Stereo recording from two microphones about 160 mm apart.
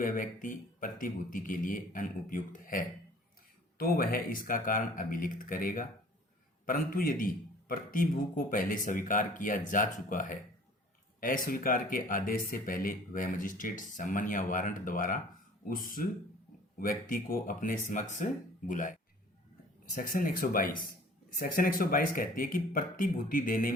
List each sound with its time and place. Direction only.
0.0 s speech: 55° left (ahead or behind)